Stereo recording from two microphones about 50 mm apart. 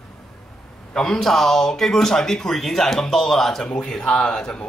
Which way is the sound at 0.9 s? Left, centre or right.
Centre.